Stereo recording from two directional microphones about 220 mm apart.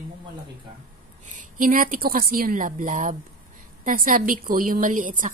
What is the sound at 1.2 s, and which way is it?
A woman's voice, 35° right (ahead or behind).